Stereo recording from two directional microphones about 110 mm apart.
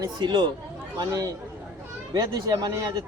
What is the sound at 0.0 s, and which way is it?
A man's voice, 40° right (ahead or behind).